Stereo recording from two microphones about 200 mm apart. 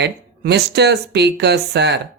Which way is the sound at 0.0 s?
55° right (ahead or behind).